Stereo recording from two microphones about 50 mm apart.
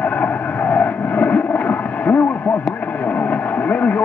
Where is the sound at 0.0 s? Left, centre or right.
Left.